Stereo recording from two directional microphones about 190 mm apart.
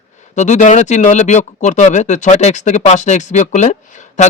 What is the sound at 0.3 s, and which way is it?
Speech, 40° left (ahead or behind).